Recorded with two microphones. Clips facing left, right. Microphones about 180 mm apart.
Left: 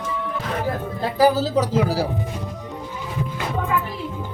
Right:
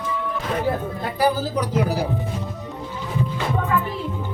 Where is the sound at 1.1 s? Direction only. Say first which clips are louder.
Left 4 dB; 90° left.